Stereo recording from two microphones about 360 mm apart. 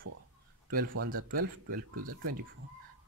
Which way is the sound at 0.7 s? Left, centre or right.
Right.